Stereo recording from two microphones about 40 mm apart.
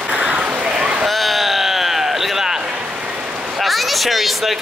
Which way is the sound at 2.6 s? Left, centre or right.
Right.